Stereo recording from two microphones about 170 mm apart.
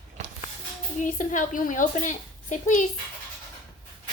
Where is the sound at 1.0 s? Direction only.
50° left (ahead or behind).